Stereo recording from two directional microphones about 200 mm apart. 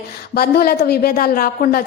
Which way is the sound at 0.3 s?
50° left (ahead or behind).